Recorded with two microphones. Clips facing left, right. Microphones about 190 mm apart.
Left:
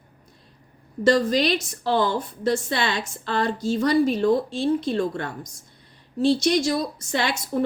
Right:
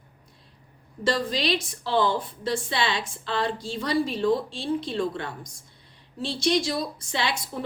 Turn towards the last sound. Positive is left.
turn(degrees=50)  # may be behind; listen again after turning